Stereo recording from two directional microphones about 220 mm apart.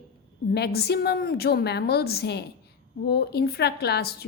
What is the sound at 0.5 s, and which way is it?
A woman's voice, 45° left (ahead or behind).